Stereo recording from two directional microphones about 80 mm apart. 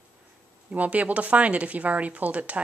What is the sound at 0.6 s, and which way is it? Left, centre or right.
Speech, centre.